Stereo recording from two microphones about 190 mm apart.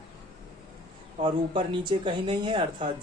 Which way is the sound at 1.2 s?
25° right (ahead or behind).